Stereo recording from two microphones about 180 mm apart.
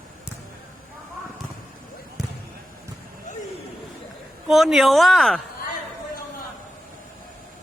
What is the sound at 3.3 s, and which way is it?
Vehicle, 45° left (ahead or behind).